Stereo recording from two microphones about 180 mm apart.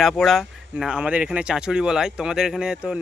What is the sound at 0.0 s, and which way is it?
Speech, centre (ahead or behind).